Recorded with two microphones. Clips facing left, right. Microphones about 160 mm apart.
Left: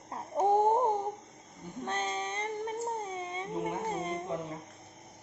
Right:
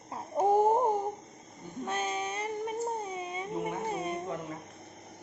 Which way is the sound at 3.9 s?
10° right (ahead or behind).